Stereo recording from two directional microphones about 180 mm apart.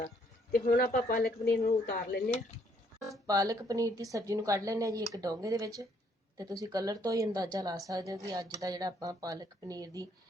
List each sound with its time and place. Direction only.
0.5 s speech: 55° left (ahead or behind)
3.2 s a woman's voice: 20° right (ahead or behind)